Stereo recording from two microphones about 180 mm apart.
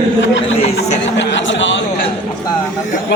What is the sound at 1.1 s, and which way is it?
Speech, 90° left.